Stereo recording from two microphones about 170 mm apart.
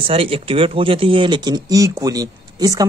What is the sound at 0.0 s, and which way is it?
Speech, 35° right (ahead or behind).